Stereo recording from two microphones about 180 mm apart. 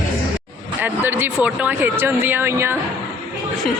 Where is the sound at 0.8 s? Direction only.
10° right (ahead or behind).